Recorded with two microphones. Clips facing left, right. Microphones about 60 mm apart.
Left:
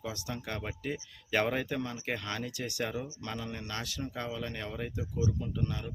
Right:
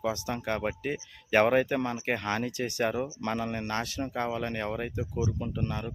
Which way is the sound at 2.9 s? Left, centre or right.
Right.